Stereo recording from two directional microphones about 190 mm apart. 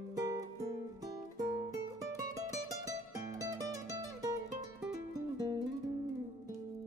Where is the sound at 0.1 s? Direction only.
20° right (ahead or behind).